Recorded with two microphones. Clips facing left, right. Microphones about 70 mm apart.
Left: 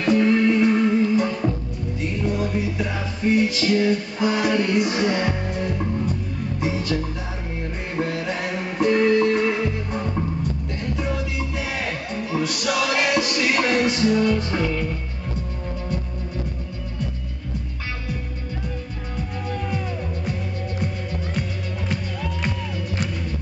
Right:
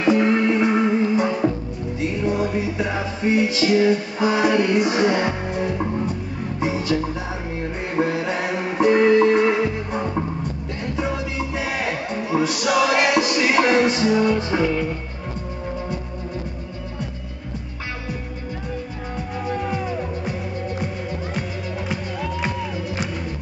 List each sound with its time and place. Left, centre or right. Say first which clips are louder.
0.0 s music: even; centre
19.4 s music: right 4 dB; centre
21.4 s music: right 1 dB; centre